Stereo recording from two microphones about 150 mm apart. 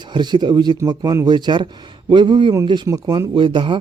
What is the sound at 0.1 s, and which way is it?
Speech, 30° right (ahead or behind).